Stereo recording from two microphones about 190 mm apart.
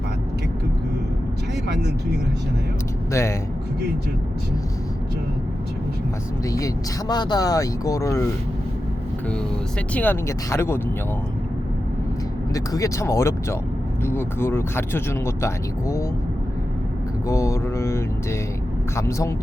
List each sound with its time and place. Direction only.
1.6 s speech: 60° right (ahead or behind)
3.1 s speech: 15° left (ahead or behind)
7.1 s speech: 20° left (ahead or behind)
9.9 s speech: 10° left (ahead or behind)
12.5 s speech: 20° left (ahead or behind)
17.2 s speech: 15° left (ahead or behind)